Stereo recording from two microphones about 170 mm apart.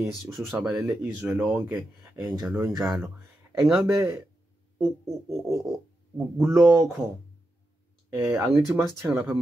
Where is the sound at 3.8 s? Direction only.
15° right (ahead or behind).